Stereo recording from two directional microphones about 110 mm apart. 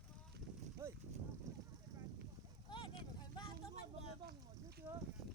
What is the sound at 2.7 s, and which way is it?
Vehicle, 45° left (ahead or behind).